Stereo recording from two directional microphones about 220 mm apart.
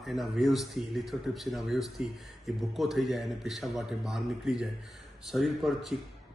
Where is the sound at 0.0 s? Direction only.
Centre (ahead or behind).